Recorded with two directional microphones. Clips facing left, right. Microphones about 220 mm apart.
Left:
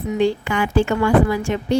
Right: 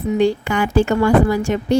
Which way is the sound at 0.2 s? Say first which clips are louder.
Right 1 dB; 45° right (ahead or behind).